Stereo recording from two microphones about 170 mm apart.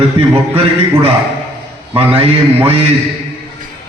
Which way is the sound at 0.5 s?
35° right (ahead or behind).